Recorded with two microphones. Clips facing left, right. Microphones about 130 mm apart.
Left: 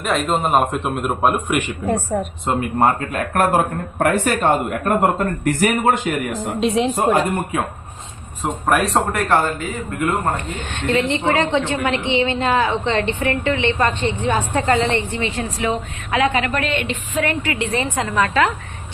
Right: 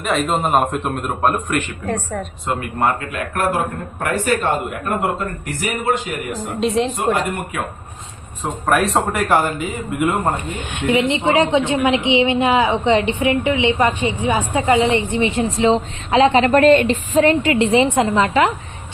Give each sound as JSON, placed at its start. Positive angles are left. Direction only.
{"t": 0.0, "sound": "a man's voice", "side_deg": 0}
{"t": 3.9, "sound": "a man's voice", "side_deg": 45}
{"t": 6.6, "sound": "a man's voice", "side_deg": 0}
{"t": 7.3, "sound": "speech", "side_deg": 30}
{"t": 8.4, "sound": "a man's voice", "side_deg": 0}
{"t": 9.4, "sound": "a woman's voice", "side_deg": -15}